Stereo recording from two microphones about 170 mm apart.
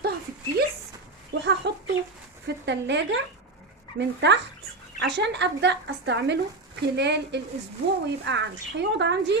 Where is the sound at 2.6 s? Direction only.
90° right.